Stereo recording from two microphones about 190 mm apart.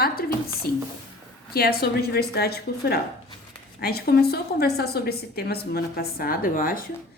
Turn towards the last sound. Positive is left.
turn(degrees=45)  # may be behind; listen again after turning